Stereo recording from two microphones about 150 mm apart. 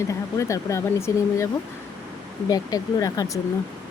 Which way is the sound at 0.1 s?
20° left (ahead or behind).